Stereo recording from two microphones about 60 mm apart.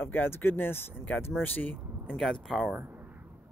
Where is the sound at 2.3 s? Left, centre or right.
Centre.